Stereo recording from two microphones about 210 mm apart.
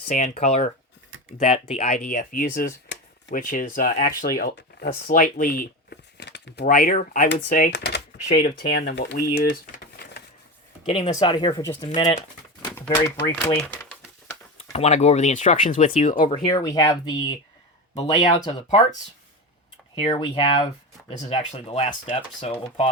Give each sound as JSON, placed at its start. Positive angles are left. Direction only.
{"t": 0.1, "sound": "speech", "side_deg": 35}
{"t": 2.0, "sound": "speech", "side_deg": 40}
{"t": 10.8, "sound": "speech", "side_deg": 25}
{"t": 12.7, "sound": "typewriter", "side_deg": 10}
{"t": 14.7, "sound": "speech", "side_deg": 30}
{"t": 16.5, "sound": "speech", "side_deg": 15}
{"t": 20.0, "sound": "speech", "side_deg": 25}
{"t": 21.1, "sound": "speech", "side_deg": 35}